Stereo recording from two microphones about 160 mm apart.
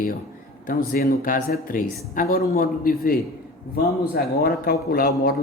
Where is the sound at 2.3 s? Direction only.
70° left (ahead or behind).